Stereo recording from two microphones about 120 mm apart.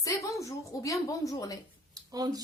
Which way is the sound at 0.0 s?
25° left (ahead or behind).